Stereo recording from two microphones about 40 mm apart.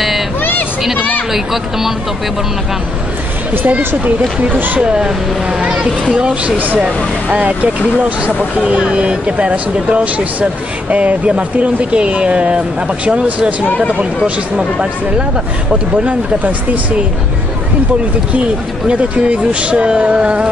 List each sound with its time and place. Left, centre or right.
0.4 s vehicle: left
1.3 s speech: centre
3.6 s speech: right
4.7 s speech: right
15.9 s speech: right
18.3 s speech: right